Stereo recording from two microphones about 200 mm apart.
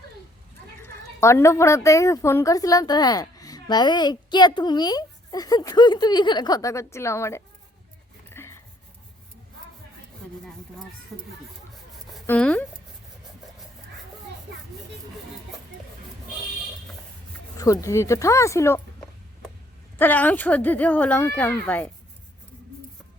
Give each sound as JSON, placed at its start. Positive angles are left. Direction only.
{"t": 0.8, "sound": "a woman's voice", "side_deg": 15}
{"t": 8.3, "sound": "writing", "side_deg": 15}
{"t": 12.2, "sound": "speech", "side_deg": 5}
{"t": 17.6, "sound": "speech", "side_deg": 15}
{"t": 20.0, "sound": "speech", "side_deg": 10}